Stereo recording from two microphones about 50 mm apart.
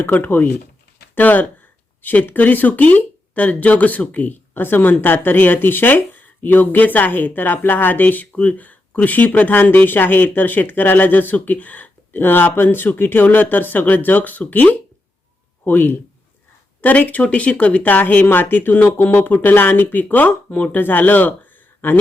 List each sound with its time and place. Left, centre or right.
0.0 s speech: left
8.3 s speech: left